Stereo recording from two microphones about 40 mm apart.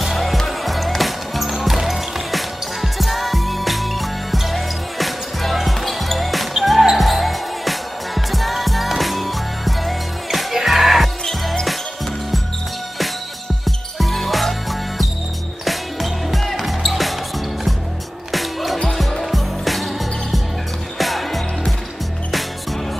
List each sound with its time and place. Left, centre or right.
0.0 s music: centre
6.5 s basketball bounce: centre
13.7 s music: centre
15.6 s music: centre
18.3 s music: centre